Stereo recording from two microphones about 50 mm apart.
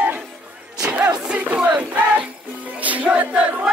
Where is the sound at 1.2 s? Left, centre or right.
Right.